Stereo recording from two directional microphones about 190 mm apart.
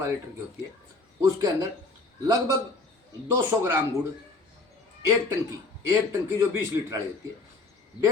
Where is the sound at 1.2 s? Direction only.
20° right (ahead or behind).